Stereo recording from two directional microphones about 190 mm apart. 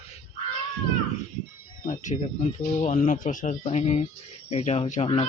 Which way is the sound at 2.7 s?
40° left (ahead or behind).